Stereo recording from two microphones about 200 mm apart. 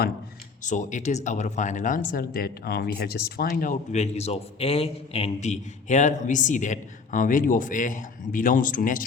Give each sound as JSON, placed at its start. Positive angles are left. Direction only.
{"t": 0.6, "sound": "speech", "side_deg": 40}